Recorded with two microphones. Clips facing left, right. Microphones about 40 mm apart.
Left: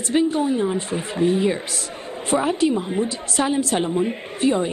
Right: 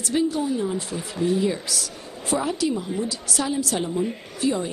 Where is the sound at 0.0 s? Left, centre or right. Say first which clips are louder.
Left 4 dB; left.